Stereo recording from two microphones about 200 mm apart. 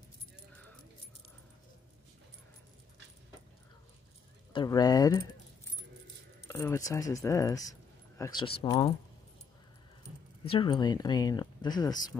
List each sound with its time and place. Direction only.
4.5 s speech: 20° left (ahead or behind)
6.4 s speech: 15° left (ahead or behind)
10.5 s speech: 25° left (ahead or behind)